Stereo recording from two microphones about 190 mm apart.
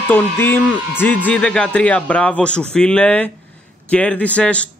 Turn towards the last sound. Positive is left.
turn(degrees=5)  # may be behind; listen again after turning